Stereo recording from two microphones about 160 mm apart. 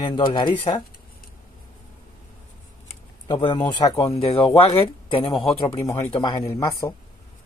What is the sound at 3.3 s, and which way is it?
Speech, 30° left (ahead or behind).